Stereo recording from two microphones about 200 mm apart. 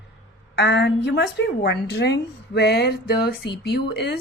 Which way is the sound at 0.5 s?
60° left (ahead or behind).